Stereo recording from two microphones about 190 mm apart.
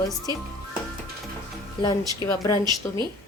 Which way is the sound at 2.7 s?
20° right (ahead or behind).